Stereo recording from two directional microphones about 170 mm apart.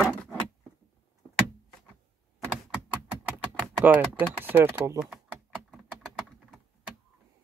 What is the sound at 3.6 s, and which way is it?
Speech, 10° right (ahead or behind).